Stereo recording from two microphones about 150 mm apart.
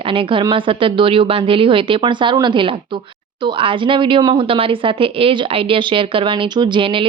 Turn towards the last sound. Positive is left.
turn(degrees=-35)  # may be behind; listen again after turning